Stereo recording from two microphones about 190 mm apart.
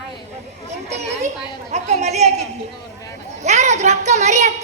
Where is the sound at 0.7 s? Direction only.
35° right (ahead or behind).